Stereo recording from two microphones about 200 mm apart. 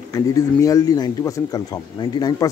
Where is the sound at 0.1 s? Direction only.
15° left (ahead or behind).